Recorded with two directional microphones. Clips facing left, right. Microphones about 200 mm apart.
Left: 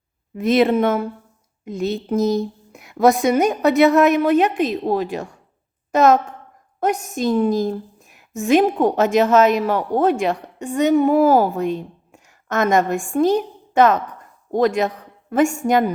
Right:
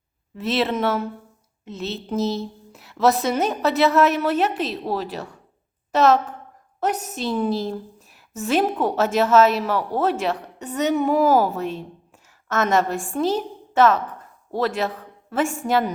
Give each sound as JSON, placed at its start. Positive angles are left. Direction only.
{"t": 0.3, "sound": "a woman's voice", "side_deg": 15}
{"t": 6.7, "sound": "a woman's voice", "side_deg": 10}
{"t": 10.9, "sound": "a woman's voice", "side_deg": 45}
{"t": 11.5, "sound": "a woman's voice", "side_deg": 15}